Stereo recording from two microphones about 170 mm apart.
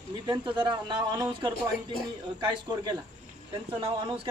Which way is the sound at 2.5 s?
25° right (ahead or behind).